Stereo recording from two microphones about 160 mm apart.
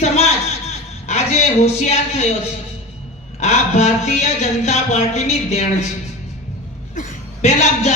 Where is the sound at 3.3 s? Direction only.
45° left (ahead or behind).